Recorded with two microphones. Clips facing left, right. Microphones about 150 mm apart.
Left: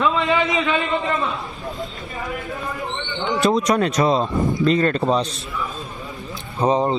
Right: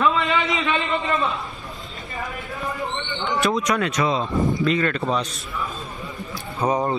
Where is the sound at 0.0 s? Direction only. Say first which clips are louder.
Left 2 dB; 20° left (ahead or behind).